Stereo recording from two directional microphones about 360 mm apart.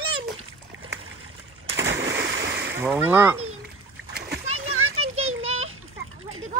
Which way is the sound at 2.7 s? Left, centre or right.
Centre.